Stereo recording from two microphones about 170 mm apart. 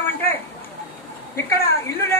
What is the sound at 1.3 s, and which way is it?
Speech, 15° left (ahead or behind).